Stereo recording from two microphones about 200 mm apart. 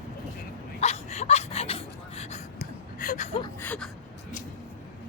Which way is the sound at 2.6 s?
40° left (ahead or behind).